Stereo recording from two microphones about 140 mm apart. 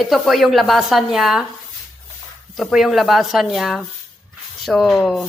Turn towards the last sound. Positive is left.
turn(degrees=0)  # may be behind; listen again after turning